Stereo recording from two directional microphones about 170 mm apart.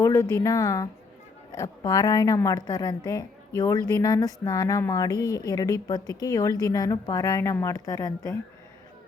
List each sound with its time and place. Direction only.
0.0 s a woman's voice: 15° left (ahead or behind)